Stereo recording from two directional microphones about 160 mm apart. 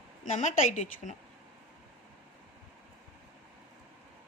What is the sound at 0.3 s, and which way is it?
Speech, 45° left (ahead or behind).